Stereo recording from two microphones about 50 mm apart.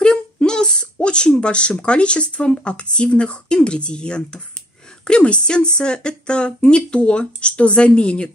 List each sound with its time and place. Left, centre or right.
0.0 s speech: centre